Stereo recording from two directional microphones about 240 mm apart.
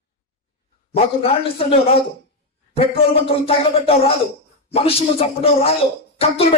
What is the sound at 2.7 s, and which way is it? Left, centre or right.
A man's voice, left.